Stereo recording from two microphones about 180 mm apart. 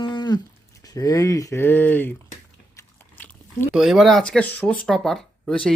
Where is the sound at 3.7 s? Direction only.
5° right (ahead or behind).